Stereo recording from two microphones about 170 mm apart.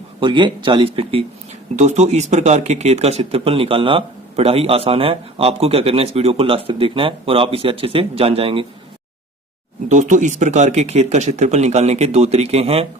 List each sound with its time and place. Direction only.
0.2 s speech: 30° right (ahead or behind)
9.9 s speech: 45° right (ahead or behind)